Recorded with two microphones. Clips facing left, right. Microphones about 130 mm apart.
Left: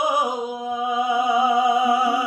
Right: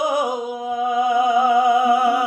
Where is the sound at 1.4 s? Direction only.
55° right (ahead or behind).